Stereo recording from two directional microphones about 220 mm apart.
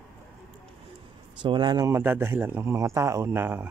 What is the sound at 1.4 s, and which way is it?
Speech, 20° right (ahead or behind).